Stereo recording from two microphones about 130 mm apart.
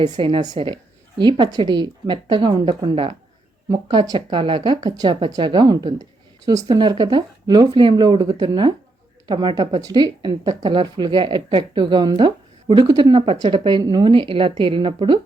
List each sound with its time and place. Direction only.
0.0 s speech: 40° right (ahead or behind)
3.7 s speech: 30° right (ahead or behind)